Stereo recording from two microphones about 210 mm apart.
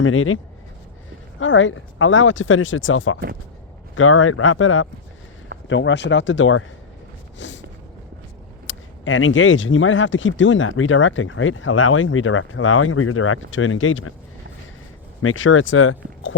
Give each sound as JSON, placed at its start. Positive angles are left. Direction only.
{"t": 0.0, "sound": "speech", "side_deg": 75}
{"t": 1.4, "sound": "speech", "side_deg": 65}
{"t": 5.6, "sound": "speech", "side_deg": 60}
{"t": 7.3, "sound": "a sound", "side_deg": 60}
{"t": 8.6, "sound": "speech", "side_deg": 65}
{"t": 15.2, "sound": "speech", "side_deg": 75}